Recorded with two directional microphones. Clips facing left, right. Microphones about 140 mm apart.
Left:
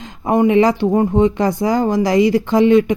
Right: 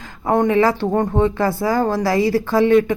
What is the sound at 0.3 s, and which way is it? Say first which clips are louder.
Speech: left 3 dB; 15° left (ahead or behind).